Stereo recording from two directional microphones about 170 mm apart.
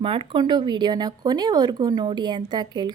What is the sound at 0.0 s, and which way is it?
Speech, 30° right (ahead or behind).